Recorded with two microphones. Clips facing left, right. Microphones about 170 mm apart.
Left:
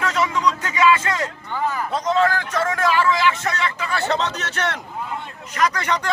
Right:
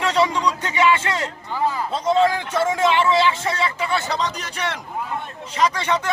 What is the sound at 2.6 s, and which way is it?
Vehicle, 25° right (ahead or behind).